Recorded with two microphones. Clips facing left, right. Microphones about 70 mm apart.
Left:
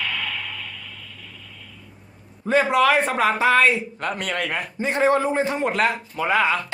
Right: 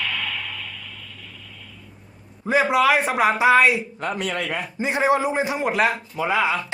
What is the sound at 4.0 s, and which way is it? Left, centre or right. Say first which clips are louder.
Speech: even; left.